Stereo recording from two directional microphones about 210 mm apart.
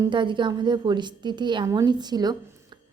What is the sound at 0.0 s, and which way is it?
Speech, 20° right (ahead or behind).